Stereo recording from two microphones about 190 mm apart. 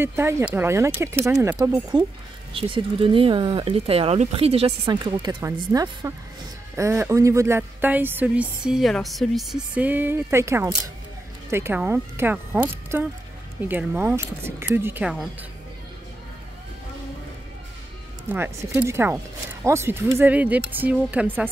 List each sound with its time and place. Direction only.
0.0 s speech: 15° right (ahead or behind)
18.3 s speech: 15° right (ahead or behind)